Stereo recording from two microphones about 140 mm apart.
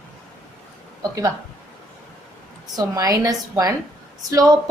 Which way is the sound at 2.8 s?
25° right (ahead or behind).